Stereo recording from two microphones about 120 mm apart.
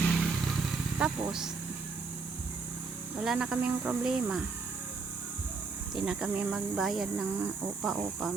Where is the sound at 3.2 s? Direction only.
5° right (ahead or behind).